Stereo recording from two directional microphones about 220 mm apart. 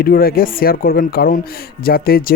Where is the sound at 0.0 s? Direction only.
40° left (ahead or behind).